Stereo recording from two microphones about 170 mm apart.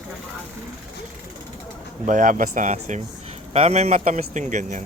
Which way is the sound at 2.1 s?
50° right (ahead or behind).